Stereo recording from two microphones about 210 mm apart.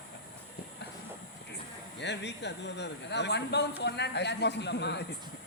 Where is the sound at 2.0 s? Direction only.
55° left (ahead or behind).